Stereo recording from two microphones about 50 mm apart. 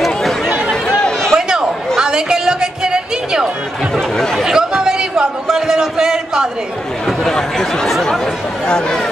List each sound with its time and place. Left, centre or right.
0.0 s chatter: centre
0.8 s chatter: centre
1.3 s a sound: centre
7.1 s chatter: centre
8.6 s speech: centre